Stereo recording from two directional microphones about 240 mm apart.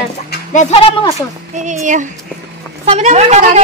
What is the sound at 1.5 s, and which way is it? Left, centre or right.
A woman's voice, right.